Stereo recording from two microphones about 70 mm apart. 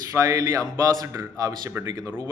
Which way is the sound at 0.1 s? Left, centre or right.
Right.